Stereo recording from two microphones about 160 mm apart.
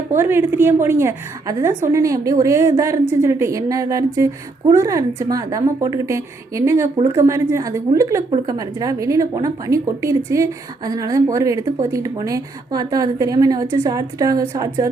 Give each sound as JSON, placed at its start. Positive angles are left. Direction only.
{"t": 0.1, "sound": "a woman's voice", "side_deg": -15}